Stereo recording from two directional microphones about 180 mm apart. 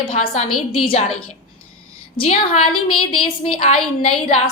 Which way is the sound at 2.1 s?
30° left (ahead or behind).